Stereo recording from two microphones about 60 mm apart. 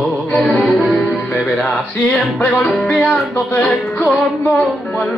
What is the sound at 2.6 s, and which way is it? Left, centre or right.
Speech, centre.